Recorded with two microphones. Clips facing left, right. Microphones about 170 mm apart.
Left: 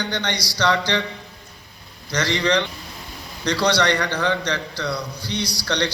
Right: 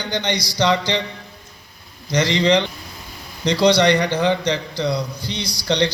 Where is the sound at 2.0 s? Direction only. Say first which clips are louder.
Right 4 dB; 15° right (ahead or behind).